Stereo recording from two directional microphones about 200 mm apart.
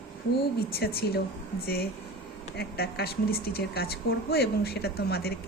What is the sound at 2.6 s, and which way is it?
Speech, 50° left (ahead or behind).